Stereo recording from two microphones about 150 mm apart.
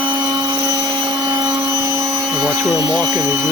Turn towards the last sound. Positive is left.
turn(degrees=-20)  # may be behind; listen again after turning